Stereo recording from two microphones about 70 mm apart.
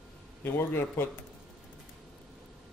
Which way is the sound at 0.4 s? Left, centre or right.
Left.